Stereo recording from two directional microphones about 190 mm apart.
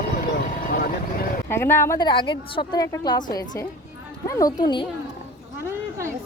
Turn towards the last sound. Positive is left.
turn(degrees=20)  # may be behind; listen again after turning